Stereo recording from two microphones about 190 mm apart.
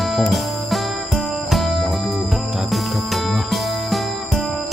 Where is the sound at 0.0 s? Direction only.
Centre (ahead or behind).